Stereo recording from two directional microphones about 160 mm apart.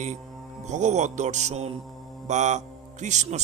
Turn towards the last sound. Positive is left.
turn(degrees=-50)  # may be behind; listen again after turning